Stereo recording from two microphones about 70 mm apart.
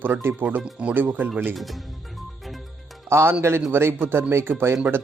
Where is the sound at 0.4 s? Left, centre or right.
Right.